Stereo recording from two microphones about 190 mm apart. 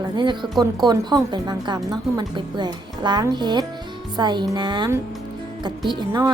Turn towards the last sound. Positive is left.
turn(degrees=-20)  # may be behind; listen again after turning